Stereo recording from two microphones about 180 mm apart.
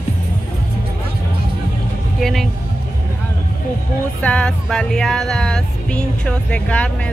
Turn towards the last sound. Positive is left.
turn(degrees=5)  # may be behind; listen again after turning